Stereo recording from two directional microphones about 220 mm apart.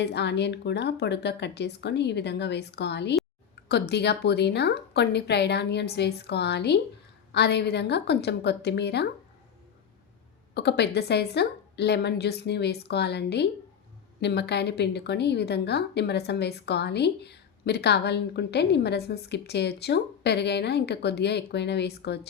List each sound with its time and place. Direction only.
0.0 s a woman's voice: 50° left (ahead or behind)
10.5 s a woman's voice: 50° left (ahead or behind)